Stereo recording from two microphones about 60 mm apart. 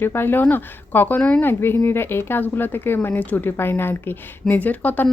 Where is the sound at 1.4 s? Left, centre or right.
Left.